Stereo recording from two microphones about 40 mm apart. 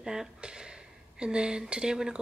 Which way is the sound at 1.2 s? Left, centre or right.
Right.